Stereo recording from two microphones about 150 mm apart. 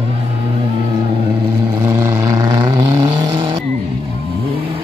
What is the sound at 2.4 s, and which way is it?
Vehicle, 25° right (ahead or behind).